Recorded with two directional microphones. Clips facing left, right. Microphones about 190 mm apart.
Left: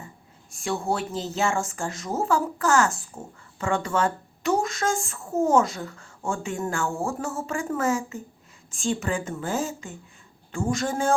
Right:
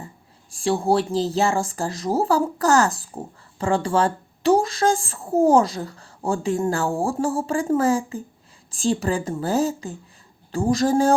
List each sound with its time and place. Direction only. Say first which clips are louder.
0.5 s speech: right 7 dB; 30° right (ahead or behind)